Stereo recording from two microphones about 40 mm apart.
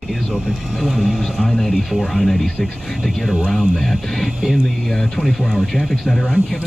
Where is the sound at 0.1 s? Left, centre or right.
Centre.